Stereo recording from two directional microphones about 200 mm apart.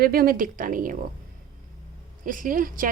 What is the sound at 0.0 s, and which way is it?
Speech, 45° right (ahead or behind).